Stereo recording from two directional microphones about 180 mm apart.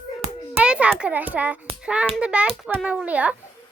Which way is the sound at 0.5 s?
5° right (ahead or behind).